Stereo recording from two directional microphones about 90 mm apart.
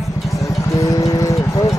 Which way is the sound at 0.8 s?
40° left (ahead or behind).